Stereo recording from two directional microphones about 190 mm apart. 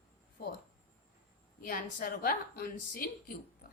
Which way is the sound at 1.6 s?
45° left (ahead or behind).